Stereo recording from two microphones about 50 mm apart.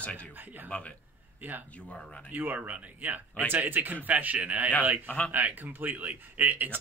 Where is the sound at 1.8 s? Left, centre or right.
Left.